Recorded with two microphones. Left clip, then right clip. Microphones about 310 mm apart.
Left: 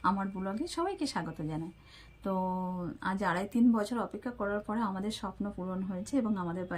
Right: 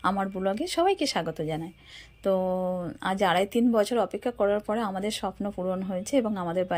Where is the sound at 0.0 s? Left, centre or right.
Centre.